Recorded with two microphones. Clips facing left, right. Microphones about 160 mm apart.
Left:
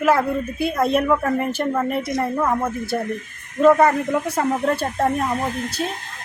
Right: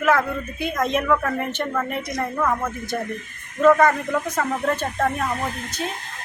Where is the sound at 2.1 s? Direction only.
25° left (ahead or behind).